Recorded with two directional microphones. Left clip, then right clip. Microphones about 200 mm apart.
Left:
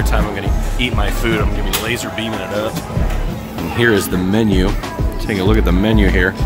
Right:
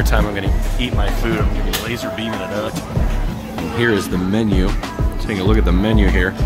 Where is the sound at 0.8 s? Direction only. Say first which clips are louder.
Left 4 dB; 10° left (ahead or behind).